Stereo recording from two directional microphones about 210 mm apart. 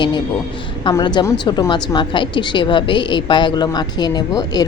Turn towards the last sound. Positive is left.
turn(degrees=20)  # may be behind; listen again after turning